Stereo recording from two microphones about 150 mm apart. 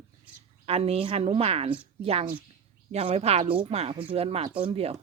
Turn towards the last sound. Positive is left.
turn(degrees=-40)  # may be behind; listen again after turning